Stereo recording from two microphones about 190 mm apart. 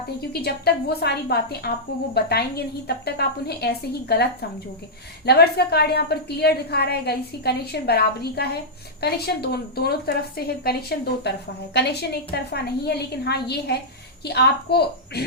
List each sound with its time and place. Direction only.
0.4 s a woman's voice: 55° left (ahead or behind)